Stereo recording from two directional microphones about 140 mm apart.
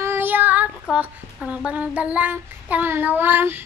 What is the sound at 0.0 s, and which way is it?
Child singing, 15° right (ahead or behind).